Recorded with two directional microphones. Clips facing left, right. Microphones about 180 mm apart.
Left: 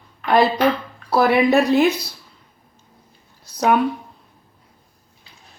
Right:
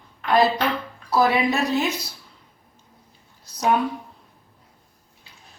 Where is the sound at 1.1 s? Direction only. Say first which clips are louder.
Left 4 dB; 60° left (ahead or behind).